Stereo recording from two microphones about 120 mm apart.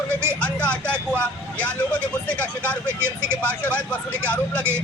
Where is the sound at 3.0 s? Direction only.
20° right (ahead or behind).